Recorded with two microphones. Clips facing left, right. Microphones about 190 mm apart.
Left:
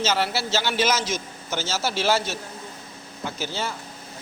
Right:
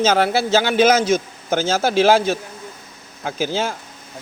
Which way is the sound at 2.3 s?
90° right.